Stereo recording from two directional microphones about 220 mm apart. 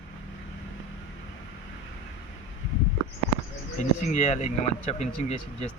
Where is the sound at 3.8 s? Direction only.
35° left (ahead or behind).